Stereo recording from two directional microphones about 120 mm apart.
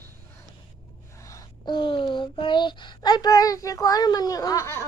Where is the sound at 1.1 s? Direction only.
25° left (ahead or behind).